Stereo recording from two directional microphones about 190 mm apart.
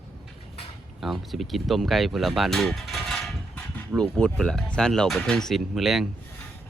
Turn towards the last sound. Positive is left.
turn(degrees=0)  # may be behind; listen again after turning